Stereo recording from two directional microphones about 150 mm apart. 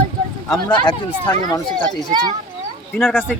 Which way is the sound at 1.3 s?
20° left (ahead or behind).